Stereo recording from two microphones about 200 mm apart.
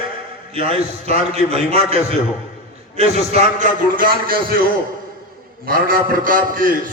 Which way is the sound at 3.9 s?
45° right (ahead or behind).